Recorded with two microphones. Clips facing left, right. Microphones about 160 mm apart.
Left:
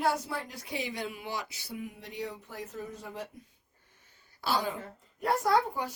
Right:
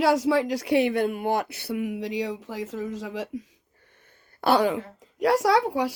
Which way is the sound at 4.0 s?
60° right (ahead or behind).